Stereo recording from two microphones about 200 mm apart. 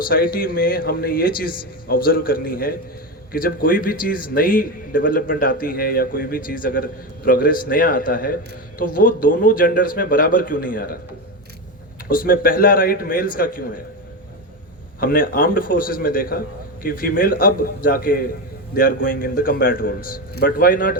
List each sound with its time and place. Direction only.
0.0 s a man's voice: 45° left (ahead or behind)
12.0 s a man's voice: 45° left (ahead or behind)
15.0 s a man's voice: 45° left (ahead or behind)